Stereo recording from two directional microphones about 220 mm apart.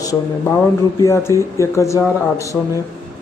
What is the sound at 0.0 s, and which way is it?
Speech, 15° left (ahead or behind).